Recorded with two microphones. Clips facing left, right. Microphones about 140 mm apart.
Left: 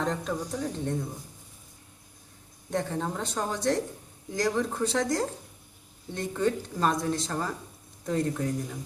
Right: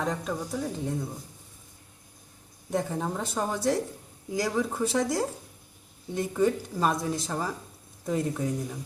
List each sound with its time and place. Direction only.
0.0 s speech: 5° right (ahead or behind)
2.6 s speech: 10° right (ahead or behind)